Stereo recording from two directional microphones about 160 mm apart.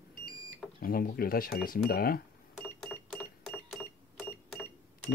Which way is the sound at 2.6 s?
5° left (ahead or behind).